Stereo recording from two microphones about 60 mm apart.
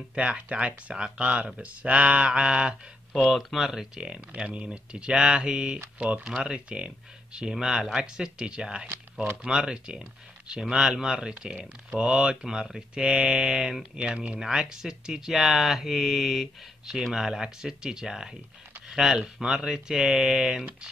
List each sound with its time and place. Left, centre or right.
0.1 s speech: centre
3.1 s speech: centre
4.3 s speech: right